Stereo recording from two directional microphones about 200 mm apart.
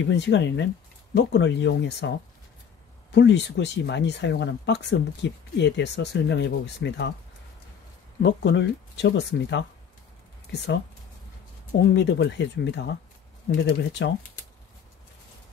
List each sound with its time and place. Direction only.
0.0 s speech: 65° left (ahead or behind)
8.2 s speech: 60° left (ahead or behind)
11.8 s speech: 60° left (ahead or behind)